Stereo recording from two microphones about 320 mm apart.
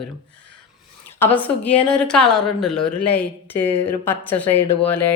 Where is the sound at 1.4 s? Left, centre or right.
Centre.